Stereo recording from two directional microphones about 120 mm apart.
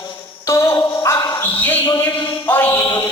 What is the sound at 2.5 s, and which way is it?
Mantra, 15° left (ahead or behind).